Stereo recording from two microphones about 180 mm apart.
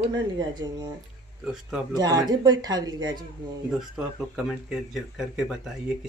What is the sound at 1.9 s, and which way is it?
Speech, 20° right (ahead or behind).